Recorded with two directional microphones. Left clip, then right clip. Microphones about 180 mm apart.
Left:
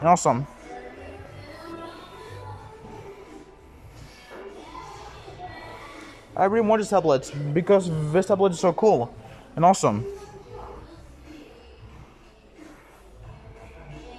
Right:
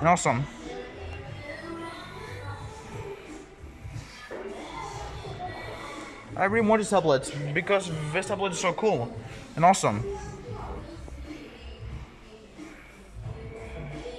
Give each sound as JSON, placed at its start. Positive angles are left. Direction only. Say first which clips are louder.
{"t": 0.0, "sound": "a man's voice", "louder": "left 4 dB", "side_deg": 10}
{"t": 6.3, "sound": "a man's voice", "louder": "left 3 dB", "side_deg": 10}
{"t": 7.5, "sound": "a man's voice", "louder": "left 6 dB", "side_deg": 25}